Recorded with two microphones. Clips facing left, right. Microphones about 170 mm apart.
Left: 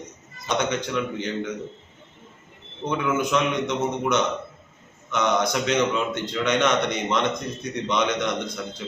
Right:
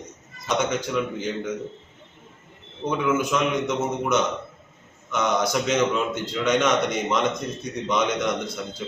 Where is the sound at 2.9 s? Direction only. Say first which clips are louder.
Right 1 dB; 5° right (ahead or behind).